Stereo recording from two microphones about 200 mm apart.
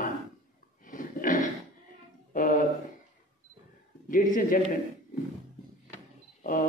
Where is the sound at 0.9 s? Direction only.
40° left (ahead or behind).